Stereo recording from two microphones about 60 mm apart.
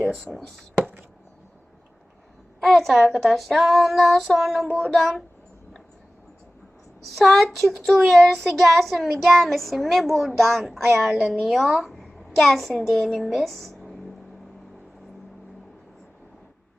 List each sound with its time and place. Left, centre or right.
0.1 s speech: centre
2.6 s speech: centre
4.7 s speech: centre
7.2 s speech: centre
10.8 s a woman's voice: right
11.0 s a child's voice: centre